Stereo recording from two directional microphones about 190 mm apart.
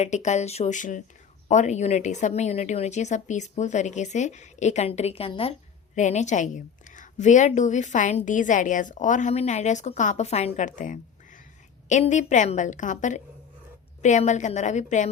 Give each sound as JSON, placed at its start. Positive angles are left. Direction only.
{"t": 0.0, "sound": "a woman's voice", "side_deg": 35}